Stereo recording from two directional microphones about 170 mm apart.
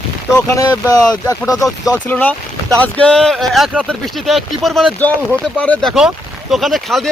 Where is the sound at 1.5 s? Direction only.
20° left (ahead or behind).